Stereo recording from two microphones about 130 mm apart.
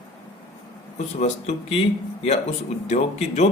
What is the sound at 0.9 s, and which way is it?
Speech, 55° left (ahead or behind).